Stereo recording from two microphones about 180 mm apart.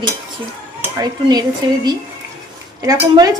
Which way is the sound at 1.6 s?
25° right (ahead or behind).